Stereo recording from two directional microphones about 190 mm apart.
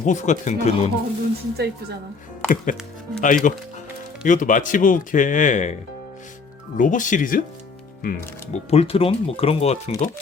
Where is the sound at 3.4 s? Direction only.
45° left (ahead or behind).